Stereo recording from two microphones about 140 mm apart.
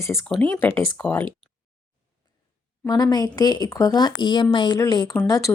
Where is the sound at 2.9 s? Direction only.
30° left (ahead or behind).